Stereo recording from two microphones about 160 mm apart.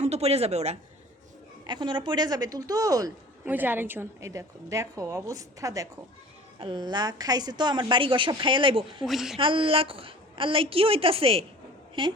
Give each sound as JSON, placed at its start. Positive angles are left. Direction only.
{"t": 0.0, "sound": "a woman's voice", "side_deg": -40}
{"t": 1.6, "sound": "a woman's voice", "side_deg": -30}
{"t": 3.5, "sound": "a woman's voice", "side_deg": -10}
{"t": 9.0, "sound": "speech", "side_deg": 0}
{"t": 9.4, "sound": "a woman's voice", "side_deg": -35}